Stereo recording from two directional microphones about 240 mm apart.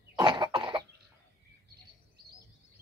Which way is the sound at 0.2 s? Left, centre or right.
Centre.